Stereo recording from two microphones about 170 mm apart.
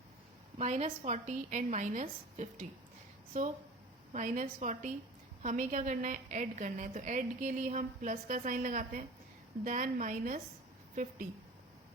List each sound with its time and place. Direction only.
0.6 s a woman's voice: 40° right (ahead or behind)